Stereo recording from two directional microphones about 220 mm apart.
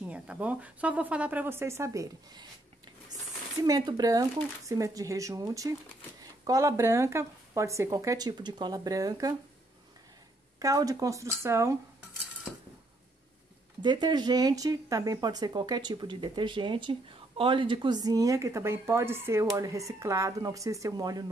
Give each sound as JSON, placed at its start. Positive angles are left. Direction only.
{"t": 0.0, "sound": "speech", "side_deg": -5}
{"t": 3.6, "sound": "speech", "side_deg": -15}
{"t": 10.6, "sound": "speech", "side_deg": -15}
{"t": 13.8, "sound": "speech", "side_deg": -20}